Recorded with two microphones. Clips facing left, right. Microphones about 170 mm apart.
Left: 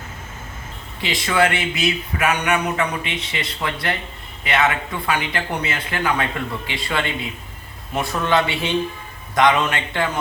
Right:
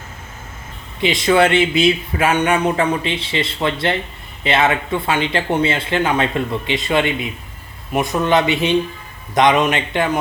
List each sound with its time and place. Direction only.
1.0 s a man's voice: 25° right (ahead or behind)